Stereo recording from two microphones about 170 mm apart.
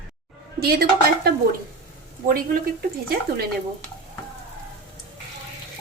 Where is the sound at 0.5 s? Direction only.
65° right (ahead or behind).